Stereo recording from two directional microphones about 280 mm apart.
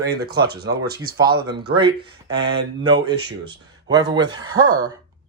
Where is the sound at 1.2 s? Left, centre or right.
Centre.